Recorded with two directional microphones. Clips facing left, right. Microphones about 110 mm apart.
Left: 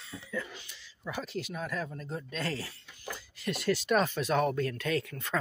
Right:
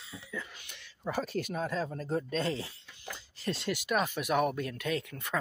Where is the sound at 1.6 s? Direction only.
30° right (ahead or behind).